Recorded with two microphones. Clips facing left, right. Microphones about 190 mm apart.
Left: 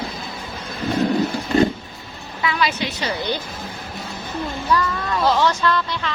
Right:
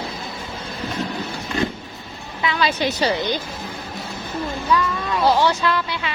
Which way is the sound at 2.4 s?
25° right (ahead or behind).